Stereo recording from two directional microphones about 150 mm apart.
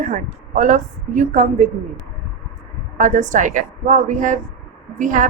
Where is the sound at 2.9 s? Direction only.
60° right (ahead or behind).